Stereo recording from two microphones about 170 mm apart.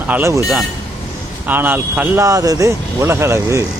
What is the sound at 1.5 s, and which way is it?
Speech, 10° right (ahead or behind).